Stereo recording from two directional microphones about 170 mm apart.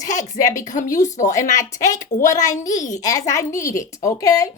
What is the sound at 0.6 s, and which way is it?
Speech, 50° left (ahead or behind).